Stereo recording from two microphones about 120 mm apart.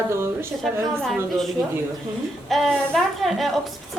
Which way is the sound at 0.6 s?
Centre (ahead or behind).